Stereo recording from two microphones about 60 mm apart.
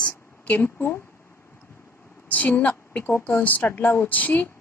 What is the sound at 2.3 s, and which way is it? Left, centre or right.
A woman's voice, left.